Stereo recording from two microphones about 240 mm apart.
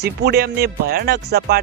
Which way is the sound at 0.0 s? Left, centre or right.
Right.